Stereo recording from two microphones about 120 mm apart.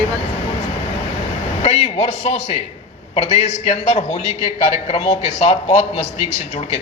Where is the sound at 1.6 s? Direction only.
60° left (ahead or behind).